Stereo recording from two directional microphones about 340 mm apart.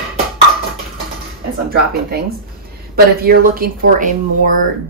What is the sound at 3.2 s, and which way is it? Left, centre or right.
A woman's voice, right.